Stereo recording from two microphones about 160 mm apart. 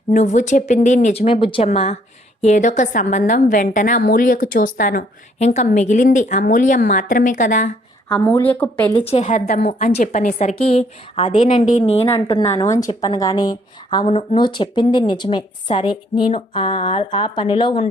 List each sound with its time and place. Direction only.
0.1 s a woman's voice: 50° left (ahead or behind)
8.1 s a woman's voice: 10° left (ahead or behind)
9.0 s a woman's voice: 45° left (ahead or behind)
12.9 s speech: 25° left (ahead or behind)